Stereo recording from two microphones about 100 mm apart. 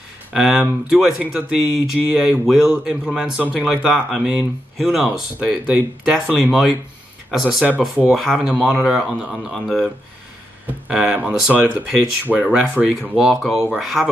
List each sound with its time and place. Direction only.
0.3 s speech: 10° right (ahead or behind)
10.7 s speech: 15° right (ahead or behind)